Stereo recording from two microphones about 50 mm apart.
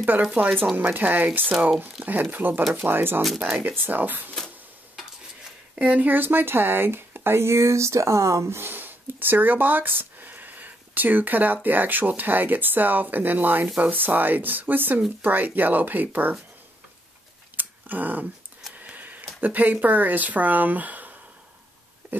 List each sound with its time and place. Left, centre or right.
0.0 s speech: right
0.3 s speech: right
0.7 s speech: right
3.7 s speech: right
5.8 s speech: right
8.5 s speech: right
17.6 s dog: right
18.8 s speech: right